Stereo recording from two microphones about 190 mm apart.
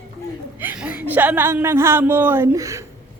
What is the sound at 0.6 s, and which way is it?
Speech, 10° right (ahead or behind).